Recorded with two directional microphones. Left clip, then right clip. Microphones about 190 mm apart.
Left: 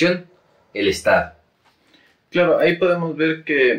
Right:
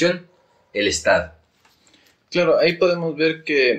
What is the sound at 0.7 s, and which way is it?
Speech, 30° right (ahead or behind).